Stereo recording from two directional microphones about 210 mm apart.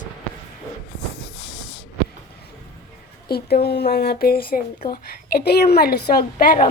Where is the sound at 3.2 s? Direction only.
50° left (ahead or behind).